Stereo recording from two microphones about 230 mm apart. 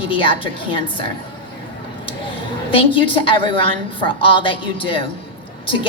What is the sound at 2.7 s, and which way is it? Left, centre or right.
A woman's voice, left.